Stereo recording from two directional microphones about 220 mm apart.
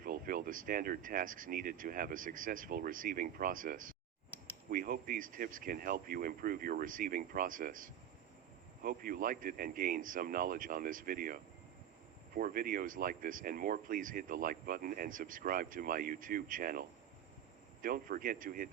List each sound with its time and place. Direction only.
0.0 s speech: 40° right (ahead or behind)
12.4 s speech: 40° right (ahead or behind)
17.8 s speech: 40° right (ahead or behind)